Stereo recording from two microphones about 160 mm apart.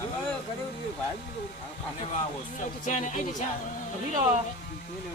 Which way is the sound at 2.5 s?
50° left (ahead or behind).